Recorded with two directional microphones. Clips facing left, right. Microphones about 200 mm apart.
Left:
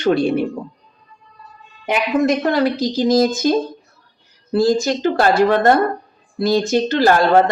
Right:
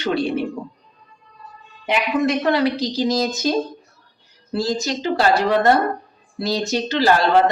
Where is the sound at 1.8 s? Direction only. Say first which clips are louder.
Left 3 dB; 45° left (ahead or behind).